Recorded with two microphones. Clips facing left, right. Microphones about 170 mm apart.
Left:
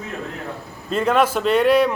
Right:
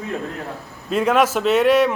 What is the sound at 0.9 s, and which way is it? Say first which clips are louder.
A man's voice: right 1 dB; 5° right (ahead or behind).